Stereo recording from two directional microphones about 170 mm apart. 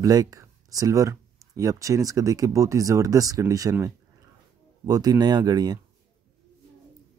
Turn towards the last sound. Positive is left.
turn(degrees=-25)  # may be behind; listen again after turning